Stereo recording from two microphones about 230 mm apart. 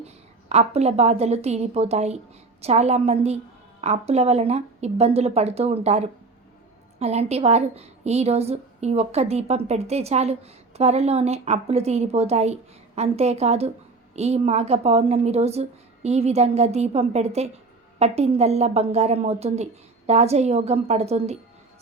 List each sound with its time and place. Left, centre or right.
0.0 s a woman's voice: right